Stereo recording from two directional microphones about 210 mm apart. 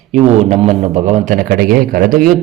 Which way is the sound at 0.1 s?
30° right (ahead or behind).